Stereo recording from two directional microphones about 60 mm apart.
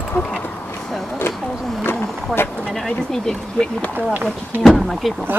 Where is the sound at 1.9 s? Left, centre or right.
Centre.